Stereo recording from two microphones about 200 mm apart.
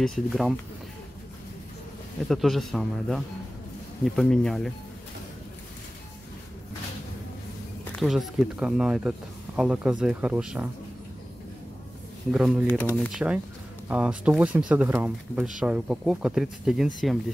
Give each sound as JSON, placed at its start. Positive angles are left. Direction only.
{"t": 0.0, "sound": "speech", "side_deg": 0}
{"t": 2.2, "sound": "speech", "side_deg": 0}
{"t": 8.0, "sound": "speech", "side_deg": 0}
{"t": 12.3, "sound": "speech", "side_deg": -5}
{"t": 12.6, "sound": "speech", "side_deg": 10}
{"t": 13.8, "sound": "speech", "side_deg": -5}